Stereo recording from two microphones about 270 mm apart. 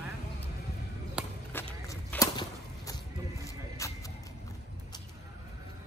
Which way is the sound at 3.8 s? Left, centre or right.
Centre.